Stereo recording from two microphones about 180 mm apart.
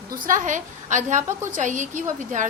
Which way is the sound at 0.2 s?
45° right (ahead or behind).